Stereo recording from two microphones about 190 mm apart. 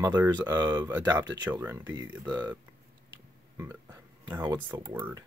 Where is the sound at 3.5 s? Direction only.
15° right (ahead or behind).